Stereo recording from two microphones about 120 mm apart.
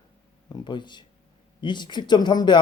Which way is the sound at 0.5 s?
40° left (ahead or behind).